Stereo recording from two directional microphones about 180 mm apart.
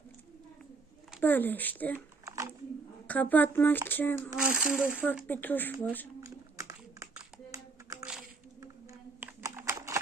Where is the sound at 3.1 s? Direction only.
10° left (ahead or behind).